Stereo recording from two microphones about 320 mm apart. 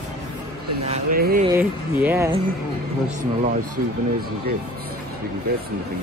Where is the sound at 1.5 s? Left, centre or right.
Centre.